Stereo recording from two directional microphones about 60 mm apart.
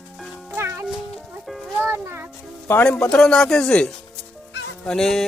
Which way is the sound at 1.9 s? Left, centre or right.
Right.